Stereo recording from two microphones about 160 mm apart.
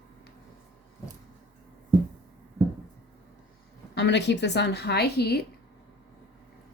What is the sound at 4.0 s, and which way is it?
Speech, 90° left.